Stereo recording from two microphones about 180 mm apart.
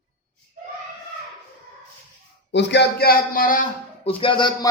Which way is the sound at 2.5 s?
75° left (ahead or behind).